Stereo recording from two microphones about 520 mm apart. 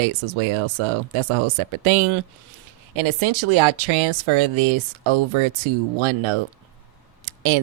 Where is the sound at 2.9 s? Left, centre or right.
Right.